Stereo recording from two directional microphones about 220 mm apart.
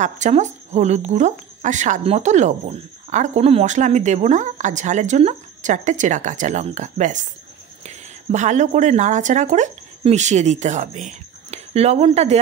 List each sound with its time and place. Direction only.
0.0 s speech: 30° right (ahead or behind)